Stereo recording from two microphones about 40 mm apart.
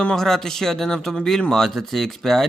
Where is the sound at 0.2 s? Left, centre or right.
Centre.